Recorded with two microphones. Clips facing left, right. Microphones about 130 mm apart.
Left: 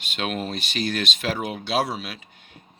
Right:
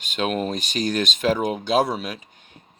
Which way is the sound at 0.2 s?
45° right (ahead or behind).